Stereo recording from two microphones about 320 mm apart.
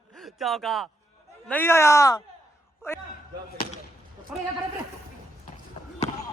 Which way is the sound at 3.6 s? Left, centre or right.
Left.